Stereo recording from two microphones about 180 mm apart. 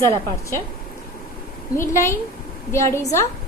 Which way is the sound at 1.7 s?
15° left (ahead or behind).